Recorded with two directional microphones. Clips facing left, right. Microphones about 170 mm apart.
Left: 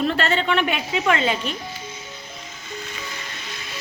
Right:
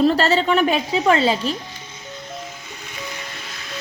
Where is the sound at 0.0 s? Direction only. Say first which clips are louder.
Right 5 dB; 35° right (ahead or behind).